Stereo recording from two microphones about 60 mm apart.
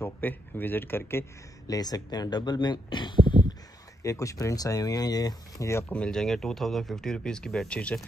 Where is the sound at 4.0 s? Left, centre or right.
Left.